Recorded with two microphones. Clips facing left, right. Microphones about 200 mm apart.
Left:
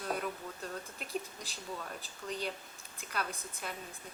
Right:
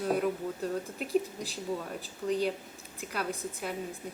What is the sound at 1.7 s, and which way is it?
Speech, 15° right (ahead or behind).